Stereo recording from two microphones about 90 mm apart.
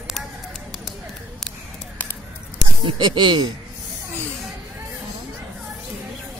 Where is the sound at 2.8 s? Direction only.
60° right (ahead or behind).